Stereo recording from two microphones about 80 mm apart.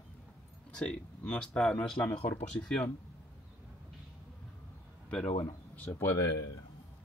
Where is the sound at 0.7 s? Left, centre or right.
Centre.